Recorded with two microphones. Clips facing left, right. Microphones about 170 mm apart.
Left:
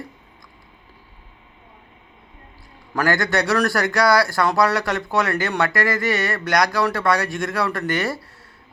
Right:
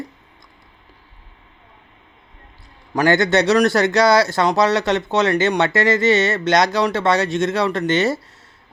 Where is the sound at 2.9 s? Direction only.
20° right (ahead or behind).